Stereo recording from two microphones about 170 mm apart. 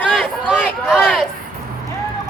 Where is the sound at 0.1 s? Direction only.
5° right (ahead or behind).